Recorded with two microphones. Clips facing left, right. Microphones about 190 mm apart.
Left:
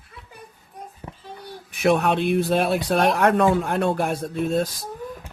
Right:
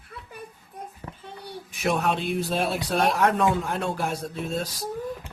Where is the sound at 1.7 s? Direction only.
60° left (ahead or behind).